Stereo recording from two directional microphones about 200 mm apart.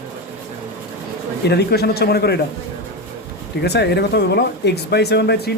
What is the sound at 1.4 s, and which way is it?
Speech, 55° left (ahead or behind).